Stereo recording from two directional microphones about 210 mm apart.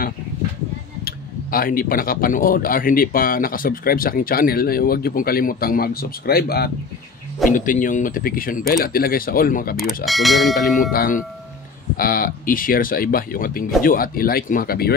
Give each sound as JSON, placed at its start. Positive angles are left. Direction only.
{"t": 1.0, "sound": "speech", "side_deg": 45}
{"t": 10.0, "sound": "speech", "side_deg": 0}
{"t": 10.9, "sound": "speech", "side_deg": 40}